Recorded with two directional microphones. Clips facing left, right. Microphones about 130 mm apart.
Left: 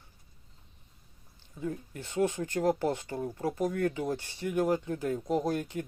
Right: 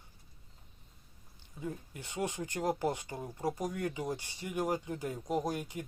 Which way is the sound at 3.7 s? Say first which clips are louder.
Left 6 dB; 50° left (ahead or behind).